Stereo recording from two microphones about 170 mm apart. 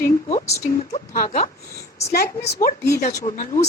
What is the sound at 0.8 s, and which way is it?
Speech, 40° left (ahead or behind).